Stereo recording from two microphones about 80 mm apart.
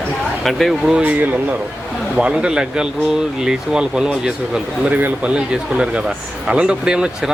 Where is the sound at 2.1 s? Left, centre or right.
Centre.